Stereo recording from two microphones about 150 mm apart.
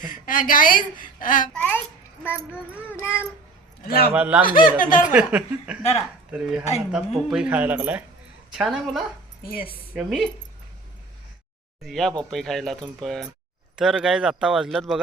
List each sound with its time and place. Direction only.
0.0 s a woman's voice: 65° left (ahead or behind)
1.5 s child singing: 10° left (ahead or behind)
3.8 s a man's voice: 90° left
4.1 s speech: 10° right (ahead or behind)
4.8 s a woman's voice: 60° left (ahead or behind)
5.1 s speech: 10° right (ahead or behind)
9.4 s speech: 80° left
9.9 s speech: 5° right (ahead or behind)
11.8 s speech: centre (ahead or behind)